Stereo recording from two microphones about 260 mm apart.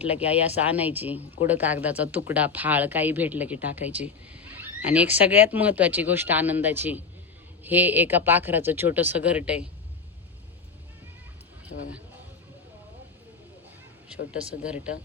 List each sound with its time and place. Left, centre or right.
0.0 s speech: centre
11.7 s speech: left
14.6 s speech: centre